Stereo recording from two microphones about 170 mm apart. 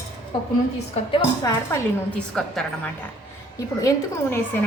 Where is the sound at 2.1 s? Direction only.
5° left (ahead or behind).